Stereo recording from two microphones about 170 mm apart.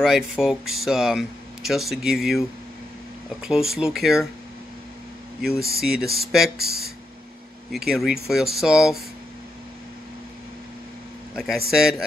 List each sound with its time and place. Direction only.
0.0 s speech: 5° right (ahead or behind)
3.4 s speech: centre (ahead or behind)
5.8 s speech: centre (ahead or behind)
6.6 s speech: 65° right (ahead or behind)
7.7 s speech: centre (ahead or behind)
11.3 s speech: centre (ahead or behind)